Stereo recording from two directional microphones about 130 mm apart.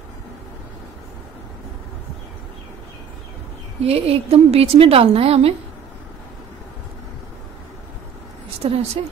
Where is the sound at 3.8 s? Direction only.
50° right (ahead or behind).